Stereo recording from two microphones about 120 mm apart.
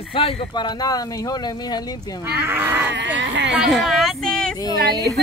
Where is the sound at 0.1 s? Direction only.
50° left (ahead or behind).